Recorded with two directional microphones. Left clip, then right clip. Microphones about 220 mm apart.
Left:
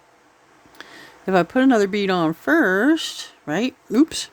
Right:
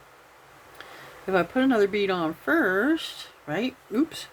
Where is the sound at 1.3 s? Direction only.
50° left (ahead or behind).